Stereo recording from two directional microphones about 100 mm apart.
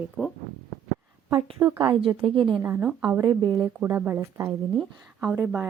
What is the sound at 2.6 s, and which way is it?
Speech, 20° right (ahead or behind).